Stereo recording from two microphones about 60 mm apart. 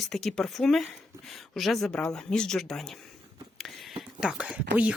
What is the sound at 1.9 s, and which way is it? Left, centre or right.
Speech, centre.